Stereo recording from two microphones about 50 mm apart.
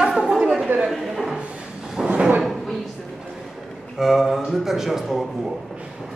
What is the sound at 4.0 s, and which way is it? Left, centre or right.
Speech, centre.